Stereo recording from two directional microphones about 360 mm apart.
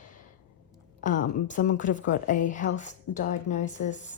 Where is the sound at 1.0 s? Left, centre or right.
Left.